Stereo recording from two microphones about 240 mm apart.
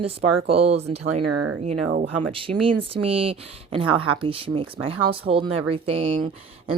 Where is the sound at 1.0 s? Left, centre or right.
Right.